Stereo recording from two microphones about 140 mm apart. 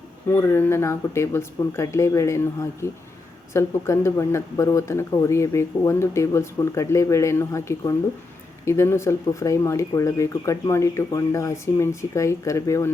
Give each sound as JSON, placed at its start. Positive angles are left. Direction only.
{"t": 0.3, "sound": "speech", "side_deg": 20}